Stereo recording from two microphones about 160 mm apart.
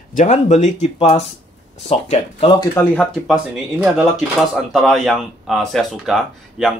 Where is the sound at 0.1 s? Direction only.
50° left (ahead or behind).